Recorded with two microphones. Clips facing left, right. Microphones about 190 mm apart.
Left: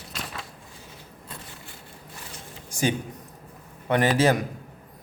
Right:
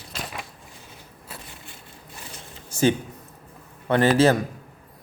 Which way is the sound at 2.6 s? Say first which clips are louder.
Right 5 dB; 15° left (ahead or behind).